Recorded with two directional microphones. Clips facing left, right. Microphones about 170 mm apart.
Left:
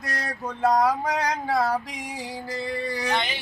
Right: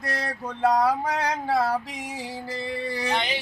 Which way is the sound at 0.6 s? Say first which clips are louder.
Even; 10° right (ahead or behind).